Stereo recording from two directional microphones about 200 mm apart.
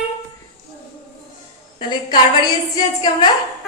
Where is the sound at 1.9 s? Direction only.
20° left (ahead or behind).